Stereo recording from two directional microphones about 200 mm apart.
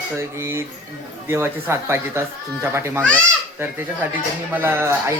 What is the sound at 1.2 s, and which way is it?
Speech, 15° right (ahead or behind).